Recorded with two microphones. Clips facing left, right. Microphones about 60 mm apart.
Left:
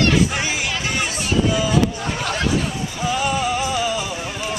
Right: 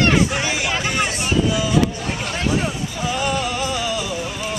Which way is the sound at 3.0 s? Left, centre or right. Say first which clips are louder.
Left 2 dB; centre.